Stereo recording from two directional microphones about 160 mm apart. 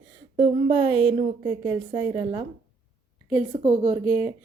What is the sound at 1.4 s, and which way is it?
A woman's voice, 25° right (ahead or behind).